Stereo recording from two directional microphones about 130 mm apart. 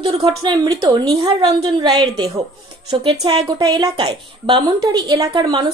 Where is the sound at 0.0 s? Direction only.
35° right (ahead or behind).